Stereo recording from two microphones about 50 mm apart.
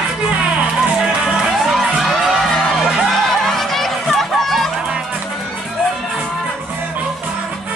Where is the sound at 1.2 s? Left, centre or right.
Centre.